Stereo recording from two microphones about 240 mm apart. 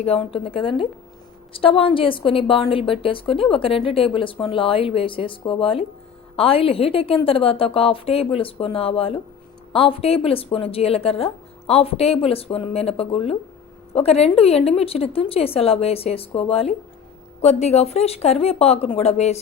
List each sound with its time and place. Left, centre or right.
0.0 s a woman's voice: left